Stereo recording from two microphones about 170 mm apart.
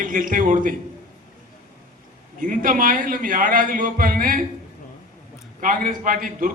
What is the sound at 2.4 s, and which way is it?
A man's voice, 55° right (ahead or behind).